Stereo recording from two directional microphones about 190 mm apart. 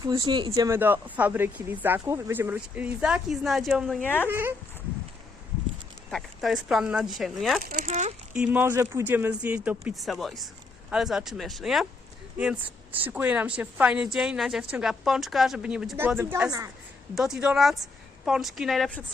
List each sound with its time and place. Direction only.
0.0 s speech: 20° right (ahead or behind); by 4.3 s 10° left (ahead or behind)
4.3 s speech: 10° right (ahead or behind)
6.1 s a woman's voice: centre (ahead or behind)
7.6 s speech: 45° right (ahead or behind)
8.4 s a woman's voice: 10° right (ahead or behind)
17.2 s a woman's voice: 5° right (ahead or behind)